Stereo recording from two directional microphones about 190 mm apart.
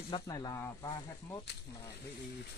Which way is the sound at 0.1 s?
20° left (ahead or behind).